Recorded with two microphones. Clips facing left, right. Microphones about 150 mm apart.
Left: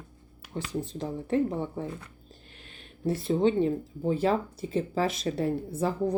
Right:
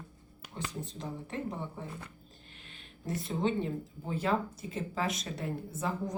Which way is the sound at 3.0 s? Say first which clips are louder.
Left 8 dB; 30° left (ahead or behind).